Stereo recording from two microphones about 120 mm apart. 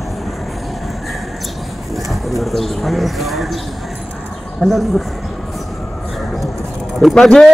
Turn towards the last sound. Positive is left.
turn(degrees=5)  # may be behind; listen again after turning